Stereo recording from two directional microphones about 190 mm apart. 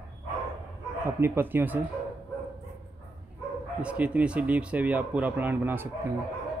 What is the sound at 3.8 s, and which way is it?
Speech, 5° right (ahead or behind).